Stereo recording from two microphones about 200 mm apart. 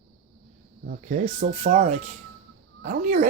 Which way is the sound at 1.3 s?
30° right (ahead or behind).